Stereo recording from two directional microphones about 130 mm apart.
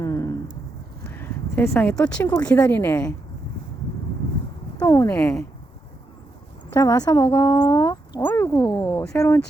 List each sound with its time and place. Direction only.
0.0 s a sound: 25° left (ahead or behind)
1.2 s a sound: 15° left (ahead or behind)
2.2 s speech: 25° left (ahead or behind)
4.8 s speech: 30° left (ahead or behind)
5.1 s speech: 10° left (ahead or behind)
6.7 s speech: 30° left (ahead or behind)
8.2 s speech: 15° left (ahead or behind)
8.6 s a sound: 35° left (ahead or behind)
9.0 s speech: 20° left (ahead or behind)